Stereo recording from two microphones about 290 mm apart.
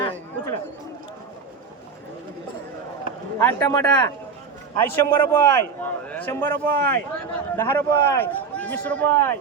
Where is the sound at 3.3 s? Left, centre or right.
Centre.